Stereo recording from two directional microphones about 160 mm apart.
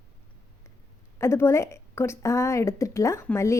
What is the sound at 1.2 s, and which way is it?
A woman's voice, 15° left (ahead or behind).